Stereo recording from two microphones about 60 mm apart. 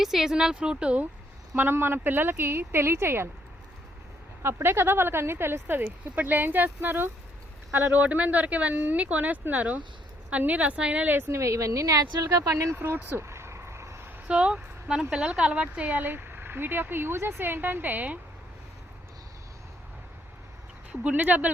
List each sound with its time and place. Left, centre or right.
0.0 s speech: centre
1.5 s speech: right
4.4 s speech: right
5.8 s speech: right
11.0 s speech: right
11.3 s speech: right
13.1 s vehicle: right
14.3 s speech: centre
20.9 s speech: right